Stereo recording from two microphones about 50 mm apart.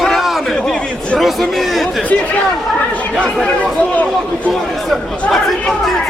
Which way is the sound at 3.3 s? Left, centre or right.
Centre.